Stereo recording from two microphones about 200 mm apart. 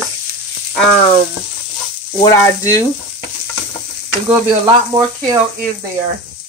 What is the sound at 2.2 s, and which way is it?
Speech, 15° left (ahead or behind).